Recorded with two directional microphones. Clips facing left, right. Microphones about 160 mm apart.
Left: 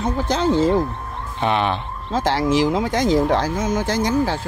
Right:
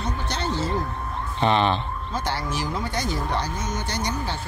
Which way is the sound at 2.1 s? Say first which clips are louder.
Left 11 dB; 90° left.